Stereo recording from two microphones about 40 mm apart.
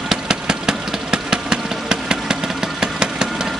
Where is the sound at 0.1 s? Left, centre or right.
Centre.